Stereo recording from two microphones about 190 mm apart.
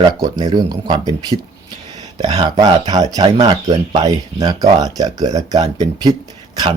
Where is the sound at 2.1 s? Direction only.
25° right (ahead or behind).